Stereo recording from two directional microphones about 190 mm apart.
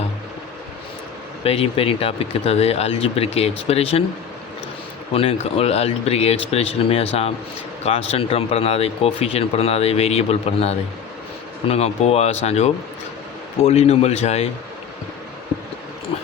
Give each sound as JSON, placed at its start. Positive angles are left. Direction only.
{"t": 1.5, "sound": "speech", "side_deg": 30}
{"t": 5.1, "sound": "speech", "side_deg": 30}